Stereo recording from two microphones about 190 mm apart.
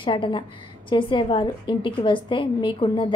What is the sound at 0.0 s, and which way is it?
A woman's voice, 25° left (ahead or behind).